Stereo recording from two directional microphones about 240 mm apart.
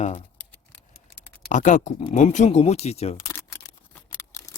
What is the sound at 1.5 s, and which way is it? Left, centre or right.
Speech, left.